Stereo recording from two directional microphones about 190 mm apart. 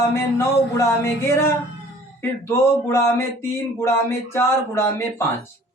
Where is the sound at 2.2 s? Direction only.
15° left (ahead or behind).